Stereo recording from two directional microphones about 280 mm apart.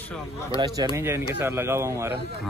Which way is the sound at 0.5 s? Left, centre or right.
Centre.